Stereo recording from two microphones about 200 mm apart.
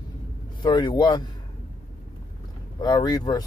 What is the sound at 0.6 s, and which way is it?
Speech, 20° left (ahead or behind).